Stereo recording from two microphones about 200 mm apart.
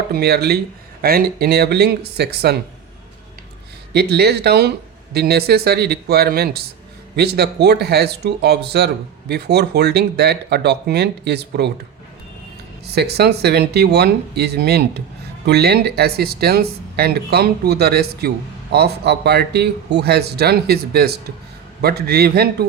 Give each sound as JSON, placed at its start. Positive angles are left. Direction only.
{"t": 0.1, "sound": "speech", "side_deg": -50}
{"t": 3.9, "sound": "speech", "side_deg": -55}
{"t": 12.8, "sound": "speech", "side_deg": -55}